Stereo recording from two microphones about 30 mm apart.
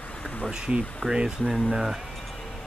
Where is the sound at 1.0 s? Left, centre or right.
Left.